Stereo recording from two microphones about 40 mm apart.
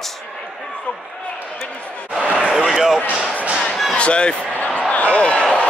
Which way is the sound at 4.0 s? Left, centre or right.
Left.